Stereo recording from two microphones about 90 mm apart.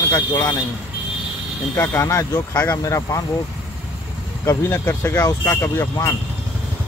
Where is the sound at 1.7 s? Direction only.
30° left (ahead or behind).